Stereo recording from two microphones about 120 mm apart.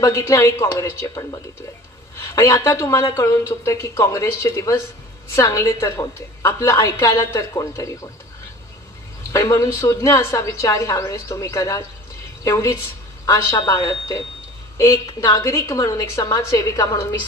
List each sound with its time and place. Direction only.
0.0 s a woman's voice: 25° left (ahead or behind)
9.3 s a woman's voice: 25° left (ahead or behind)